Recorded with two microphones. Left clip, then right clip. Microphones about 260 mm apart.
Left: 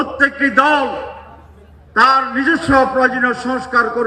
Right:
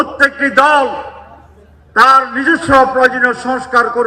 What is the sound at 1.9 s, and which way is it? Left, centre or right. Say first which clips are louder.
A man's voice: right 4 dB; centre.